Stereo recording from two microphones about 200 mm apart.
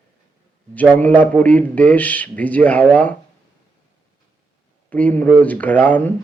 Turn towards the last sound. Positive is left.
turn(degrees=5)  # may be behind; listen again after turning